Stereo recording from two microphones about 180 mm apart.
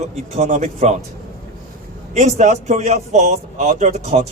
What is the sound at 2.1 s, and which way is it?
Speech, 40° right (ahead or behind).